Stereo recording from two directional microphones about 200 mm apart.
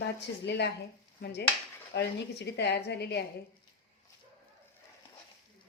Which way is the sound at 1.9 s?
60° left (ahead or behind).